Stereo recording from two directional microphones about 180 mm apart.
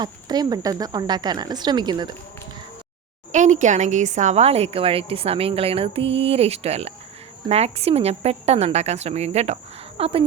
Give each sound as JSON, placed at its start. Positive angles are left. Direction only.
{"t": 0.0, "sound": "speech", "side_deg": -25}
{"t": 3.3, "sound": "a woman's voice", "side_deg": -40}